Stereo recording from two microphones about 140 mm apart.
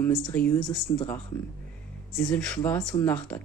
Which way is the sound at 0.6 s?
30° left (ahead or behind).